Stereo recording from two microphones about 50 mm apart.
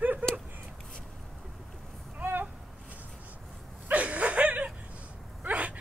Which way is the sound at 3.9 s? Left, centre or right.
Right.